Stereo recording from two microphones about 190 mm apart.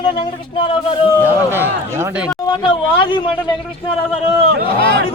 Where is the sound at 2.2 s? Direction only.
25° left (ahead or behind).